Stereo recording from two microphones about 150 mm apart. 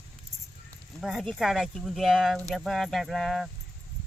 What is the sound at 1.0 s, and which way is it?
Speech, centre (ahead or behind).